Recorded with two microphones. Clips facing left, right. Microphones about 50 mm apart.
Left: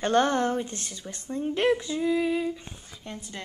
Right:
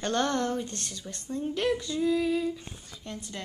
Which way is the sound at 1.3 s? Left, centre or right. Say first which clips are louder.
Left 4 dB; left.